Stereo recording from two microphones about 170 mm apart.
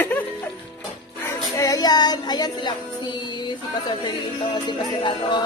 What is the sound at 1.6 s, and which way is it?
Speech, 20° left (ahead or behind).